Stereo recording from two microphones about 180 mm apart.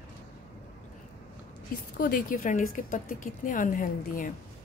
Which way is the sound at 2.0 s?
55° left (ahead or behind).